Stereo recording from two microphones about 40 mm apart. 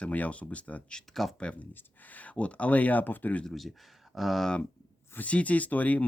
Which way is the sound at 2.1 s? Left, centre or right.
Left.